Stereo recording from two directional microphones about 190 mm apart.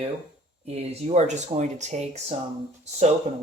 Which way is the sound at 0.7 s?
35° right (ahead or behind).